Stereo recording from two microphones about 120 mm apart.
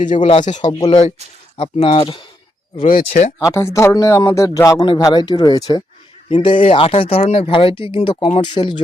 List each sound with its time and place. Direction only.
0.0 s speech: 90° left
0.3 s speech: 75° left (ahead or behind)
0.5 s speech: 40° left (ahead or behind)
0.8 s speech: 50° left (ahead or behind)
2.8 s speech: 70° left (ahead or behind)
3.4 s speech: 20° left (ahead or behind)
6.7 s speech: 50° left (ahead or behind)